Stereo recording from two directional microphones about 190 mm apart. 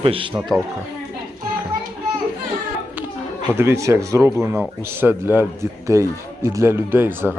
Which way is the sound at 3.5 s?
10° right (ahead or behind).